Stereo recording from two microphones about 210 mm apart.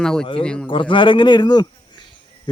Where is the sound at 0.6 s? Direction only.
25° left (ahead or behind).